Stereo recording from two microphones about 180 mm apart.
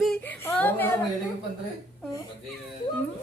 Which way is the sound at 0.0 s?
5° left (ahead or behind).